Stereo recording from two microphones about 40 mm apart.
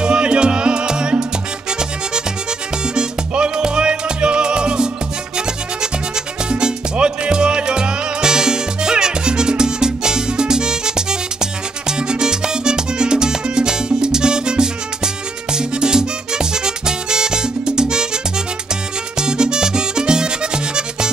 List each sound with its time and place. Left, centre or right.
0.0 s music: right
2.9 s music: right
6.5 s music: right
19.1 s music: centre